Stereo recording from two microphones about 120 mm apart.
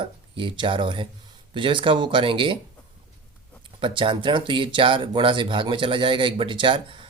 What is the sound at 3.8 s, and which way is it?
Speech, 45° right (ahead or behind).